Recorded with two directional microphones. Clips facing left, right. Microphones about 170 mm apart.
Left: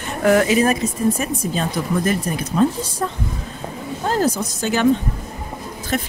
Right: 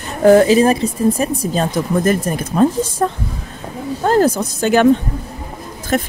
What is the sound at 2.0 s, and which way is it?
Speech, 45° right (ahead or behind).